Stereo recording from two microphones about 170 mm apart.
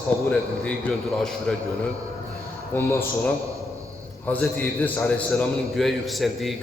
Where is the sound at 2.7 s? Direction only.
10° left (ahead or behind).